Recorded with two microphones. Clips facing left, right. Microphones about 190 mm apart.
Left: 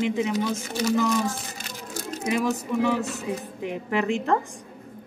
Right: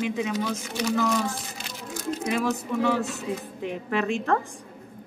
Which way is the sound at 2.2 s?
15° left (ahead or behind).